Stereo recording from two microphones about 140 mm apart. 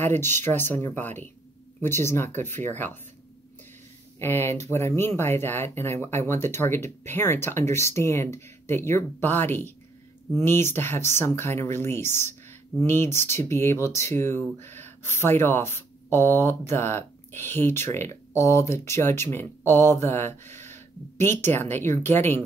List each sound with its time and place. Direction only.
0.0 s speech: 15° left (ahead or behind)
4.2 s speech: 15° left (ahead or behind)